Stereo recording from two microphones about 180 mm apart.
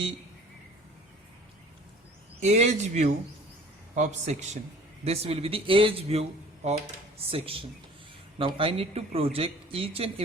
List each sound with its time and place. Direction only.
2.4 s speech: 40° right (ahead or behind)